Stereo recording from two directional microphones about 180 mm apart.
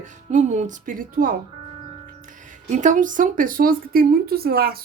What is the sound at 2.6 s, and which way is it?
Speech, 45° right (ahead or behind).